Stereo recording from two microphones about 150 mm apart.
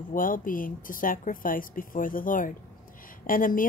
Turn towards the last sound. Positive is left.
turn(degrees=65)  # may be behind; listen again after turning